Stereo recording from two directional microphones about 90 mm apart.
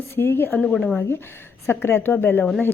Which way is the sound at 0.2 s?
25° left (ahead or behind).